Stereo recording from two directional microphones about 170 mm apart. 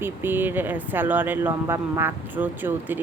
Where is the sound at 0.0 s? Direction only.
10° right (ahead or behind).